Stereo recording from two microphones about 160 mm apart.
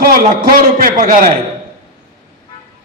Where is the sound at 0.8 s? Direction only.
55° right (ahead or behind).